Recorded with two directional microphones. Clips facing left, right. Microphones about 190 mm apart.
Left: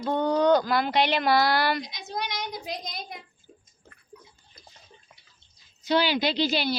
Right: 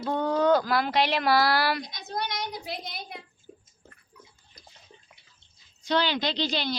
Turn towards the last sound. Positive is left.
turn(degrees=10)  # may be behind; listen again after turning